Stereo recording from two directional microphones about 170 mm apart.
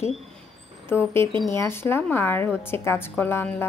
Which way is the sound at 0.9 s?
15° left (ahead or behind).